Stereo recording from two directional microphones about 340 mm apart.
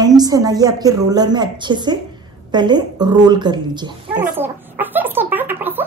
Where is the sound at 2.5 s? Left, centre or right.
Centre.